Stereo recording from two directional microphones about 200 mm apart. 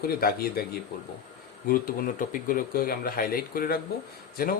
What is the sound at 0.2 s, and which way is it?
Speech, 50° left (ahead or behind).